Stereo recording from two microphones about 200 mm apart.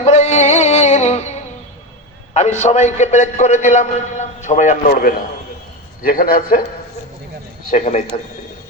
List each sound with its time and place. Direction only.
0.0 s music: 35° left (ahead or behind)
2.3 s a man's voice: 35° left (ahead or behind)
7.7 s a man's voice: 35° left (ahead or behind)